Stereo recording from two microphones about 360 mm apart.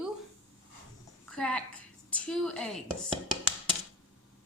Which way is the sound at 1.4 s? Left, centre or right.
Centre.